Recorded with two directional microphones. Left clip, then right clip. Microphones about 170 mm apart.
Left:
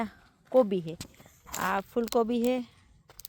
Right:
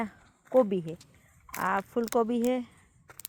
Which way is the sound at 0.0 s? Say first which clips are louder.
Even; centre (ahead or behind).